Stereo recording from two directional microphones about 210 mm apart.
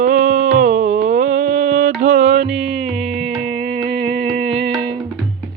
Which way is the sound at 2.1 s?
65° right (ahead or behind).